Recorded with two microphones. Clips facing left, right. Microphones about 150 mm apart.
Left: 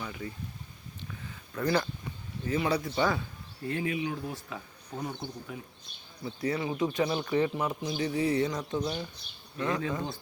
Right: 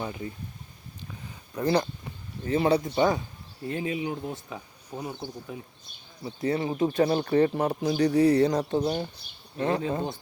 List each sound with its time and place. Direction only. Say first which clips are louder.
0.0 s speech: right 5 dB; 25° right (ahead or behind)
1.6 s speech: right 4 dB; 25° right (ahead or behind)
6.2 s speech: right 4 dB; 30° right (ahead or behind)
9.6 s speech: right 4 dB; 30° right (ahead or behind)